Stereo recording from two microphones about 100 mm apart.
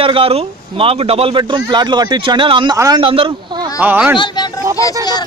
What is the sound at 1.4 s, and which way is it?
Speech, 50° right (ahead or behind).